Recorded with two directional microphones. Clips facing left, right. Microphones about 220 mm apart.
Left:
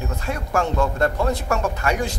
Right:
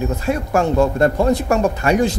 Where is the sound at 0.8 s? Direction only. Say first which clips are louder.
Right 6 dB; 25° right (ahead or behind).